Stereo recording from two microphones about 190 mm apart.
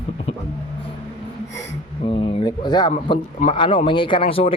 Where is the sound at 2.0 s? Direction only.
30° left (ahead or behind).